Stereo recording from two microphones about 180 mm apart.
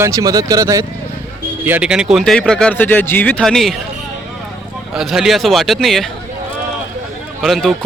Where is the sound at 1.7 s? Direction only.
5° right (ahead or behind).